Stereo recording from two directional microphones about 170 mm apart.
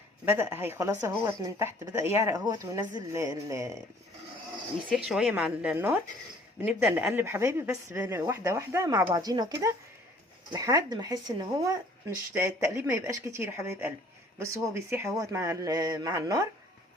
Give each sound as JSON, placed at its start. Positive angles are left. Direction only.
{"t": 0.3, "sound": "a woman's voice", "side_deg": -15}
{"t": 4.9, "sound": "a woman's voice", "side_deg": 0}